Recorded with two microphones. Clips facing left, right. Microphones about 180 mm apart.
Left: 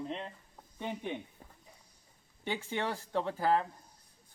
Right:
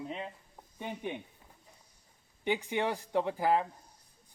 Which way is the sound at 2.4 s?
15° right (ahead or behind).